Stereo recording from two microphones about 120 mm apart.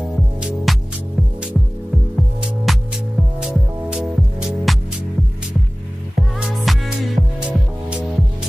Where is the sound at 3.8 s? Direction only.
5° right (ahead or behind).